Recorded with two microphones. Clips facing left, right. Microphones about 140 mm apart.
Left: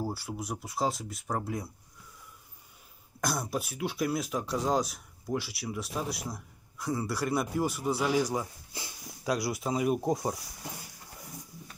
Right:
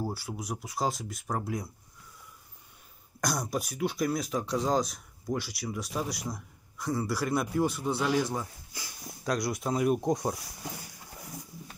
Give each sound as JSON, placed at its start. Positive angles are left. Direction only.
{"t": 0.0, "sound": "speech", "side_deg": 0}
{"t": 3.2, "sound": "speech", "side_deg": 5}
{"t": 8.7, "sound": "speech", "side_deg": 25}
{"t": 9.2, "sound": "speech", "side_deg": 5}